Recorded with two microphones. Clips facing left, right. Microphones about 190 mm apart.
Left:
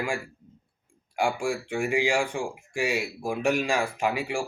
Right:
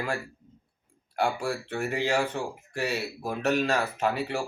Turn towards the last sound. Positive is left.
turn(degrees=10)  # may be behind; listen again after turning